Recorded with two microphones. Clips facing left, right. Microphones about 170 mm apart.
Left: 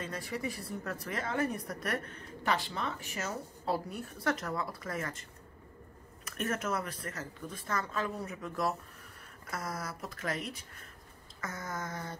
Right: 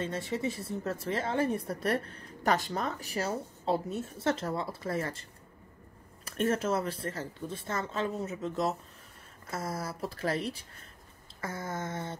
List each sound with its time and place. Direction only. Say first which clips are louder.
0.0 s speech: right 5 dB; 25° right (ahead or behind)
6.2 s speech: right 6 dB; 30° right (ahead or behind)